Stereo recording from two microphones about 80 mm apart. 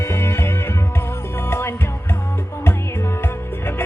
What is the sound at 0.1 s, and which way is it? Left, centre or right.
Music, left.